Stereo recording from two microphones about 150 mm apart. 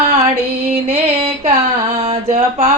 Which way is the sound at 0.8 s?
45° right (ahead or behind).